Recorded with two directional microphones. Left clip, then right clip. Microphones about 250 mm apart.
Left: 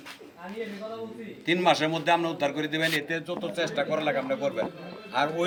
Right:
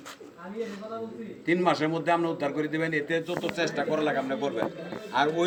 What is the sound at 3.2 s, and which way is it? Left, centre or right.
Speech, left.